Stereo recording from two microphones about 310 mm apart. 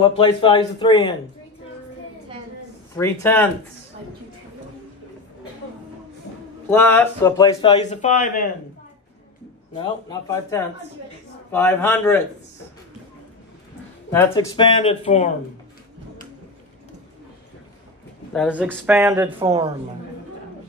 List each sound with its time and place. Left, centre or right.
0.0 s speech: centre
3.0 s speech: centre
6.7 s speech: centre; by 8.5 s left
9.8 s speech: centre
14.1 s speech: centre
18.3 s speech: centre